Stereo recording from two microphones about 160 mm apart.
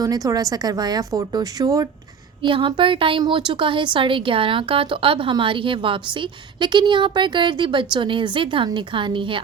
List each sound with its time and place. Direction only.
0.0 s a woman's voice: 20° right (ahead or behind)
2.4 s a woman's voice: 30° right (ahead or behind)